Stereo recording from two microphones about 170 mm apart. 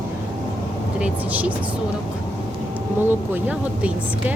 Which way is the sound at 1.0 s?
10° right (ahead or behind).